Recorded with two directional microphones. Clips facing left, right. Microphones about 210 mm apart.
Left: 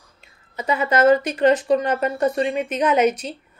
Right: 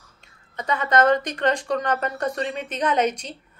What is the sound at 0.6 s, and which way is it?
A woman's voice, 10° left (ahead or behind).